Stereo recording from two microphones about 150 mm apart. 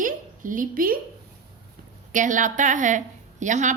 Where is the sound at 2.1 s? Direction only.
60° right (ahead or behind).